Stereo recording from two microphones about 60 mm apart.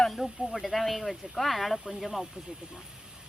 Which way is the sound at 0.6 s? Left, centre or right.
Centre.